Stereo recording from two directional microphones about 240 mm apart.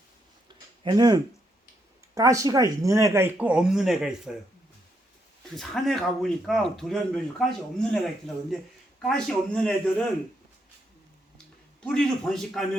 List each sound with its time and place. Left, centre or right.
0.4 s a sound: centre
2.1 s speech: centre
5.5 s speech: centre
11.8 s speech: centre